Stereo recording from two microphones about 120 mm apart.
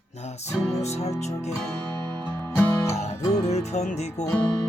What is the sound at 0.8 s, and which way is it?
Music, 65° left (ahead or behind).